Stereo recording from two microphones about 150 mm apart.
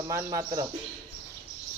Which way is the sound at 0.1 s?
20° right (ahead or behind).